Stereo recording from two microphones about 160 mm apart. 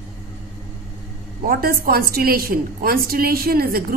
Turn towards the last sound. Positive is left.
turn(degrees=-70)  # may be behind; listen again after turning